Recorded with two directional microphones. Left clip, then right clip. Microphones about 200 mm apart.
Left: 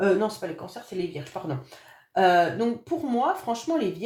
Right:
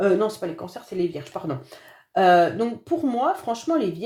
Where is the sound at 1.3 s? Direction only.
45° right (ahead or behind).